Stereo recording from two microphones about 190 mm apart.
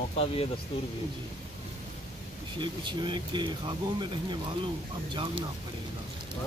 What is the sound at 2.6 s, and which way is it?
Speech, 25° right (ahead or behind).